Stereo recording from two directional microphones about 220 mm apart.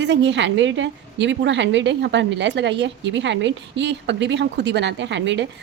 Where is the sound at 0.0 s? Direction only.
55° right (ahead or behind).